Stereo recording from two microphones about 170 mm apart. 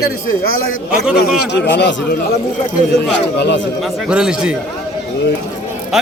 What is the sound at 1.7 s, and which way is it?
Speech, 85° left.